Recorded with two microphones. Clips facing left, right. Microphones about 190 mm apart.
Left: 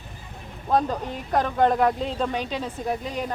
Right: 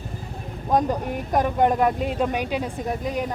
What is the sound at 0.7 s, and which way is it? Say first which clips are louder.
Speech: right 2 dB; 15° right (ahead or behind).